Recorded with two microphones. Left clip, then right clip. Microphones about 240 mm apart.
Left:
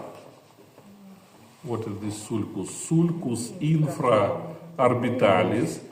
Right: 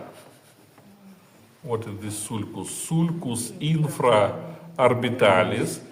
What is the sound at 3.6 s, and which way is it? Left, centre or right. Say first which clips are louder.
A man's voice: right 2 dB; right.